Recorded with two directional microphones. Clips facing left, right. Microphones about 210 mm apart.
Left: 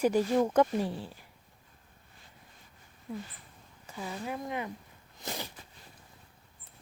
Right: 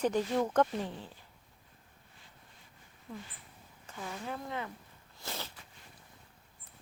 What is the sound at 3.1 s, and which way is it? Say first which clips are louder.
Speech: left 6 dB; 10° left (ahead or behind).